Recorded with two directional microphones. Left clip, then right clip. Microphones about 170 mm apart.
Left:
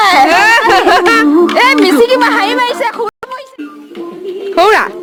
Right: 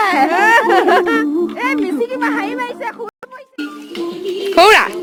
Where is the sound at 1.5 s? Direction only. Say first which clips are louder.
Left 11 dB; 25° left (ahead or behind).